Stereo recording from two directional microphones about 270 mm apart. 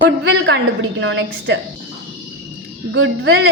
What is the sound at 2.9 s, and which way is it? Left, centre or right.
Speech, right.